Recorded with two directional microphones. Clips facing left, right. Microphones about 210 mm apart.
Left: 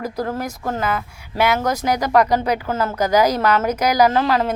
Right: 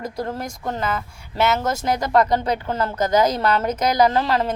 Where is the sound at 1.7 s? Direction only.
25° right (ahead or behind).